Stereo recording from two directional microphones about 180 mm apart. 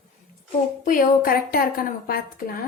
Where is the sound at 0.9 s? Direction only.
50° left (ahead or behind).